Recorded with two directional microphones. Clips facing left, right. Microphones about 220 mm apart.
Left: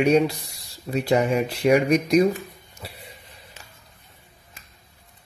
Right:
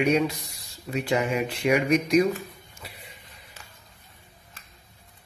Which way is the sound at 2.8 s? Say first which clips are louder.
Left 5 dB; 35° left (ahead or behind).